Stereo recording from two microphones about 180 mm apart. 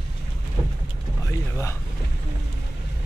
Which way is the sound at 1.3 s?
15° left (ahead or behind).